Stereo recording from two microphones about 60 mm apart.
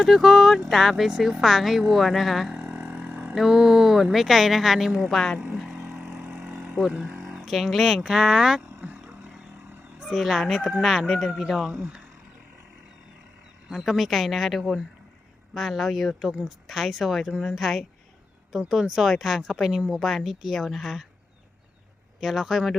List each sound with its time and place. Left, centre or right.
0.0 s a woman's voice: centre
2.6 s a sound: right
3.3 s a woman's voice: centre
5.5 s vehicle: centre
7.1 s a sound: right
7.3 s a woman's voice: centre
8.7 s vehicle: right
10.2 s a woman's voice: centre
11.7 s speech: centre
13.7 s a woman's voice: centre
22.2 s a woman's voice: centre